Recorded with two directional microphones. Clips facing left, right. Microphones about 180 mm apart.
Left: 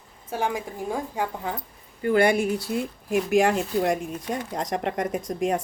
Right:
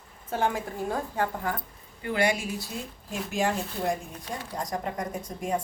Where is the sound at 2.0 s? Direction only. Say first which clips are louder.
Left 7 dB; 50° left (ahead or behind); by 4.0 s 75° left (ahead or behind).